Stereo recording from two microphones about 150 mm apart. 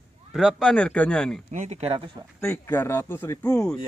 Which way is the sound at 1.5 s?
50° right (ahead or behind).